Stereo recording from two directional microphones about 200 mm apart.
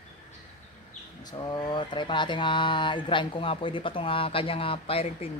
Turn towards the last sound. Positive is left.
turn(degrees=30)  # may be behind; listen again after turning